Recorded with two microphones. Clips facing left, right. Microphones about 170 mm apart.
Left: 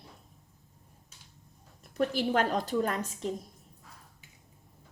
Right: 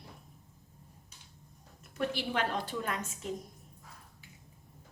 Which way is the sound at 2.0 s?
45° left (ahead or behind).